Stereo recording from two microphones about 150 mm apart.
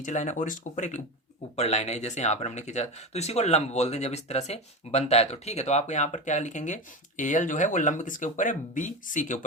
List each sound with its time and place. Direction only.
0.0 s speech: 50° left (ahead or behind)